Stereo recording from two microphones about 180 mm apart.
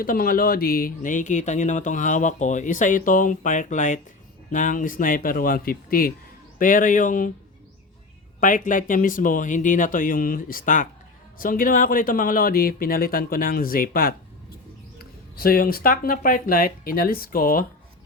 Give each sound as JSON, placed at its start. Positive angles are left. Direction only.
{"t": 0.0, "sound": "speech", "side_deg": 50}
{"t": 8.4, "sound": "speech", "side_deg": 45}
{"t": 15.4, "sound": "speech", "side_deg": 55}